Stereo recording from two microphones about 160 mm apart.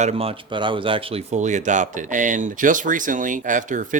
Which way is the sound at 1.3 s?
50° right (ahead or behind).